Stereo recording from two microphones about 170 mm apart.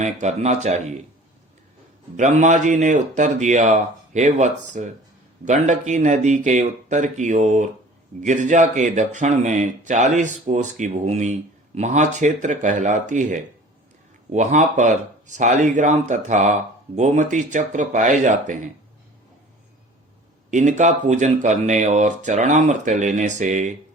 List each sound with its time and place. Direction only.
0.0 s speech: 45° right (ahead or behind)
2.1 s speech: 45° right (ahead or behind)
20.5 s speech: 45° right (ahead or behind)